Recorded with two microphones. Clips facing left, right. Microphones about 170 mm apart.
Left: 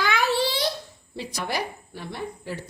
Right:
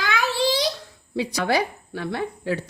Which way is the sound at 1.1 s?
85° right.